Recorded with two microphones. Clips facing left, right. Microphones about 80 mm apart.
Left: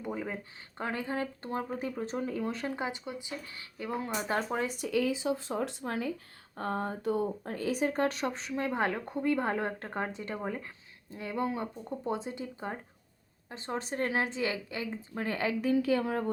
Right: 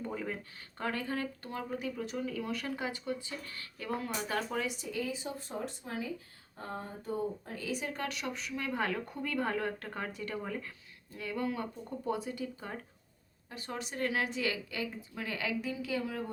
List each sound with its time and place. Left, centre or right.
0.0 s a sound: centre
0.8 s a woman's voice: left
4.8 s speech: left
7.5 s speech: left
15.1 s a woman's voice: left
15.7 s speech: left